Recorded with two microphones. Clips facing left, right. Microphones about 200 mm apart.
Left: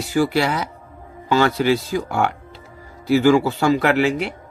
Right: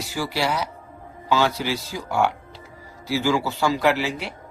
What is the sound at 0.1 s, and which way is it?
Speech, 55° left (ahead or behind).